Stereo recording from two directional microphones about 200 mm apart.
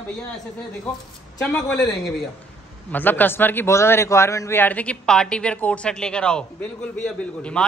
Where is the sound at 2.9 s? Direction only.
10° left (ahead or behind).